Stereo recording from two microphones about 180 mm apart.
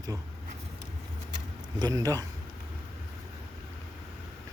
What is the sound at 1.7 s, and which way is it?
Speech, 20° right (ahead or behind).